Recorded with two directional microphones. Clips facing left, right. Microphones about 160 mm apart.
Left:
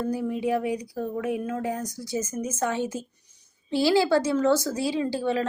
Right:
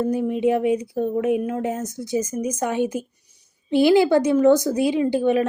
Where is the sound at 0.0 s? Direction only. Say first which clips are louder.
Right 6 dB; 20° right (ahead or behind).